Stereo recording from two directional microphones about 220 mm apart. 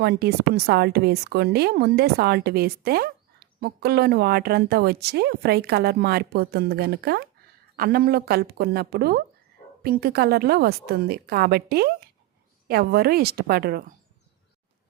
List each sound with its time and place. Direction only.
0.0 s a woman's voice: 45° right (ahead or behind)